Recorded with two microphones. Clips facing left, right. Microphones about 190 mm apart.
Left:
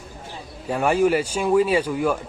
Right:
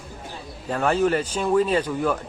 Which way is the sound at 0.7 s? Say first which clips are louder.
Left 2 dB; 10° left (ahead or behind).